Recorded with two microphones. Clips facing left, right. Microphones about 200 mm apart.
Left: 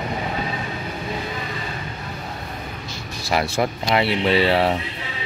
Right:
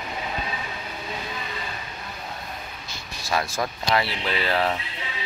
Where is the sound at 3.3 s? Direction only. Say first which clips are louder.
Left 5 dB; 25° left (ahead or behind).